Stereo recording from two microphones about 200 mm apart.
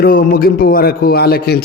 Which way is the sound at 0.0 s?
50° left (ahead or behind).